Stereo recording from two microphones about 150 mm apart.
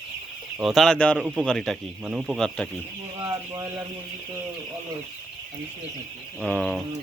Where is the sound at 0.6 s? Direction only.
Centre (ahead or behind).